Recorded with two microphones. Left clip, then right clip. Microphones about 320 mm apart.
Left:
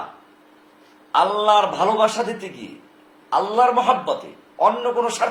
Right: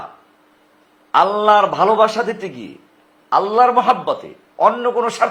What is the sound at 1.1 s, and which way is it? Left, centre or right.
A man's voice, right.